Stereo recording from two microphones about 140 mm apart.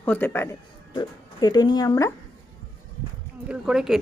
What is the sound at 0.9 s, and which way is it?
Speech, 30° left (ahead or behind).